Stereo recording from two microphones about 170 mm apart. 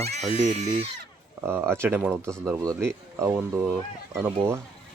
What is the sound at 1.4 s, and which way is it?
Speech, 15° right (ahead or behind).